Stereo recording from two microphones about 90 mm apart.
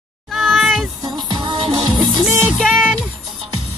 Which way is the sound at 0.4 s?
Centre (ahead or behind).